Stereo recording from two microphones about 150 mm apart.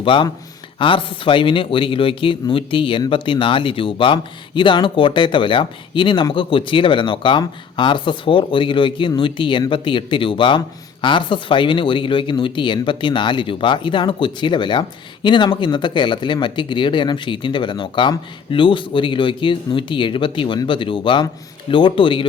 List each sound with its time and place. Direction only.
0.0 s speech: 35° left (ahead or behind)